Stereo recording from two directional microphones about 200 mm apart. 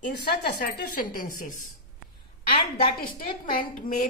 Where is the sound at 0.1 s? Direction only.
50° left (ahead or behind).